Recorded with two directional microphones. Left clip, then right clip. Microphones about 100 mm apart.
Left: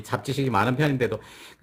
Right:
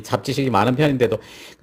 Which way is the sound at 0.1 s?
30° right (ahead or behind).